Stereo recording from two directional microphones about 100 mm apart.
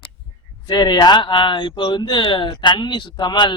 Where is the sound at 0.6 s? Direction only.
45° left (ahead or behind).